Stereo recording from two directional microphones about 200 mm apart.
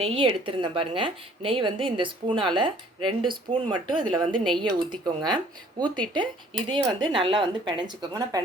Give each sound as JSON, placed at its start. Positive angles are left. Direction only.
{"t": 0.0, "sound": "a woman's voice", "side_deg": -30}